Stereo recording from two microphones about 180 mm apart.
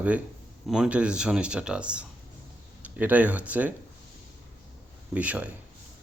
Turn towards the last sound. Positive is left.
turn(degrees=-10)  # may be behind; listen again after turning